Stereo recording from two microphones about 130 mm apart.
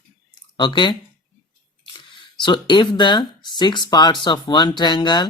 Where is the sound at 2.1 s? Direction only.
35° left (ahead or behind).